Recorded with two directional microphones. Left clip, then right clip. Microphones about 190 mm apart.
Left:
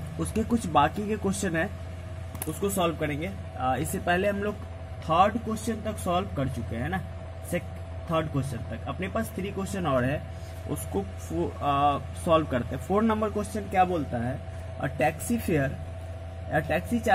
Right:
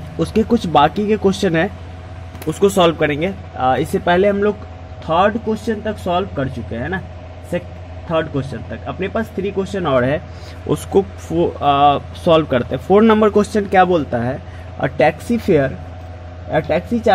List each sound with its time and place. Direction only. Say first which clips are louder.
0.2 s speech: right 13 dB; 35° right (ahead or behind)
8.1 s speech: right 10 dB; 25° right (ahead or behind)